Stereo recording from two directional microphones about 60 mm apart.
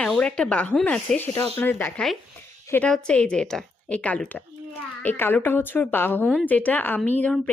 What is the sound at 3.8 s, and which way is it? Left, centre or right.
Speech, left.